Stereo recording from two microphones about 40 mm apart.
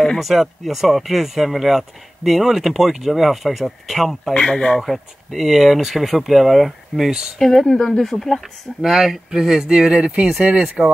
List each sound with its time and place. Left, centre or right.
0.2 s speech: centre
4.3 s speech: left
4.7 s speech: centre
8.0 s speech: centre
8.8 s speech: centre